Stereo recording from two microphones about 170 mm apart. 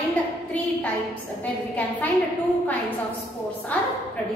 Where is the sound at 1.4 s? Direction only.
10° left (ahead or behind).